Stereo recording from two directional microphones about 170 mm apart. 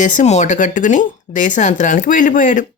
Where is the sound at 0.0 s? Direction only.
45° left (ahead or behind).